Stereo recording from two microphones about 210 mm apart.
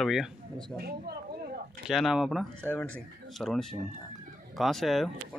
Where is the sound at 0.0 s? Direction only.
Centre (ahead or behind).